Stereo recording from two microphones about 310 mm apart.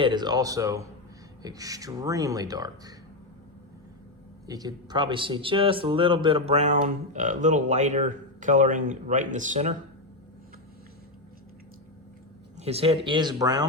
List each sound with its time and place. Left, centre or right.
0.0 s speech: centre
4.4 s speech: centre
12.5 s speech: centre